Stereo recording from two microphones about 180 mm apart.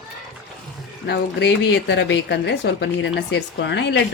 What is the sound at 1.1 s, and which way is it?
A woman's voice, 75° left (ahead or behind).